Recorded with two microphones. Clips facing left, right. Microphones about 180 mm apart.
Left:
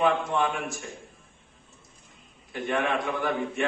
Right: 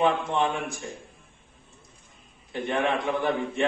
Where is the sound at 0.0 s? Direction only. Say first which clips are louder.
Right 1 dB; 25° right (ahead or behind).